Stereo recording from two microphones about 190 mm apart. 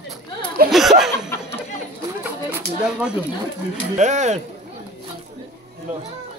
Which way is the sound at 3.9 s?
40° right (ahead or behind).